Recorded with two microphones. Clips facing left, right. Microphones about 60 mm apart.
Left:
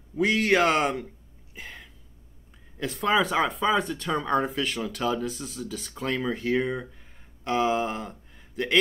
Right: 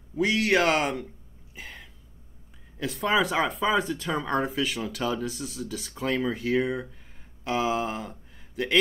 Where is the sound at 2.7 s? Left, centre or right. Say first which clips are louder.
Left 1 dB; centre.